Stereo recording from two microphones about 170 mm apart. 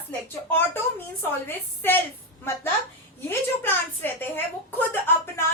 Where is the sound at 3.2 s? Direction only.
10° left (ahead or behind).